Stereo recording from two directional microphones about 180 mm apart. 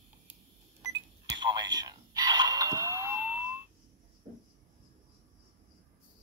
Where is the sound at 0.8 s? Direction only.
20° right (ahead or behind).